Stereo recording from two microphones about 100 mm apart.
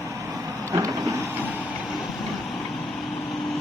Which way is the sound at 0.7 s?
30° right (ahead or behind).